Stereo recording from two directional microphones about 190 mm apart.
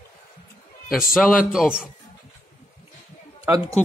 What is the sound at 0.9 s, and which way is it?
Speech, centre (ahead or behind).